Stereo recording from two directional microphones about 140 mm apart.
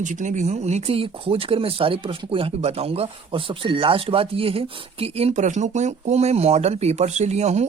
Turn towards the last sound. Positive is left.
turn(degrees=-55)  # may be behind; listen again after turning